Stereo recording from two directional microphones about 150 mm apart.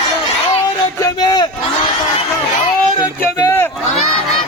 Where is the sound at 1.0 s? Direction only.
30° left (ahead or behind).